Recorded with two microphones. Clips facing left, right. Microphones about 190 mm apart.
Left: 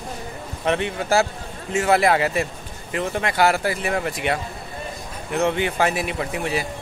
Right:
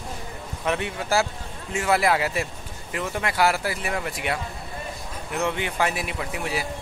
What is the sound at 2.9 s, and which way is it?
Speech, 5° right (ahead or behind).